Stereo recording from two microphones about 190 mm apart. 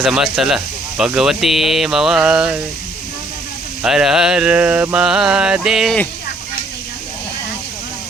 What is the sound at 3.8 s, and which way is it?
Speech, centre (ahead or behind).